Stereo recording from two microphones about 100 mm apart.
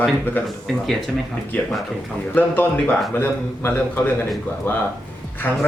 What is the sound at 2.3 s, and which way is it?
A man's voice, 20° left (ahead or behind).